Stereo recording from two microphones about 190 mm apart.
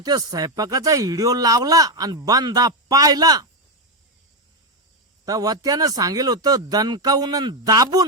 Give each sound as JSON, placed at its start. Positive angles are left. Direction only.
{"t": 0.0, "sound": "speech", "side_deg": -20}
{"t": 5.2, "sound": "speech", "side_deg": -20}